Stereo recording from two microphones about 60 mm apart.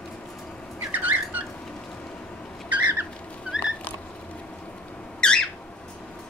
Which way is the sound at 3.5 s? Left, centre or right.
Centre.